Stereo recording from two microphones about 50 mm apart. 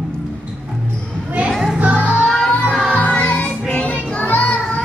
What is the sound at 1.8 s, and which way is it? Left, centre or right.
Music, right.